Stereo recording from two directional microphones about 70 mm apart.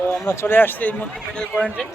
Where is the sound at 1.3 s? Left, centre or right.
Centre.